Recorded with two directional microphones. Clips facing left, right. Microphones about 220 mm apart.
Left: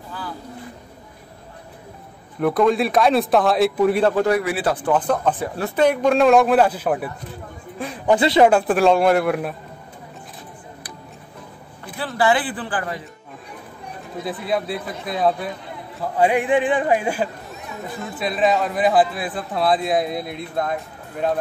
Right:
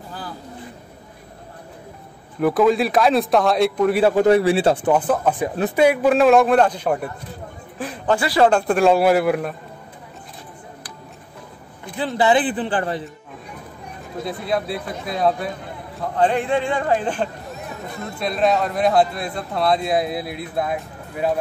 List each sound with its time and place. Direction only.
2.4 s speech: centre (ahead or behind)
4.3 s speech: 30° right (ahead or behind)
4.9 s speech: 5° right (ahead or behind)
8.1 s speech: 20° left (ahead or behind)
8.5 s speech: 5° left (ahead or behind)
11.8 s speech: 20° right (ahead or behind)
14.2 s speech: centre (ahead or behind)